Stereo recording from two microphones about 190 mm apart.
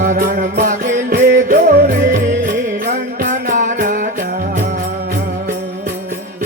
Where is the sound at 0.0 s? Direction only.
45° right (ahead or behind).